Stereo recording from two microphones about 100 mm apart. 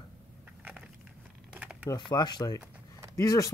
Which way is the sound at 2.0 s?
45° left (ahead or behind).